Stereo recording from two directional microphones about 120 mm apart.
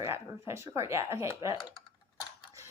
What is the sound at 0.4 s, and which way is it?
Speech, 20° right (ahead or behind).